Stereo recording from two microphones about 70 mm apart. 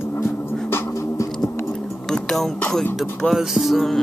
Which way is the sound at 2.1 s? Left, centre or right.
Centre.